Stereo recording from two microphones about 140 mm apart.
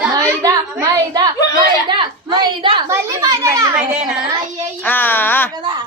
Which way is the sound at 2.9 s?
25° right (ahead or behind).